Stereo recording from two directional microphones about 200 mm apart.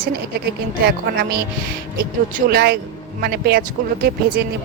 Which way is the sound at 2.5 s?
50° right (ahead or behind).